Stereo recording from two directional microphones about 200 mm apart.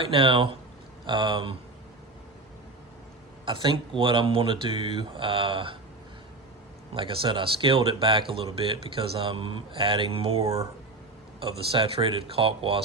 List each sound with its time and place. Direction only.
0.0 s speech: 25° right (ahead or behind)
3.4 s speech: 25° right (ahead or behind)
6.9 s speech: 25° right (ahead or behind)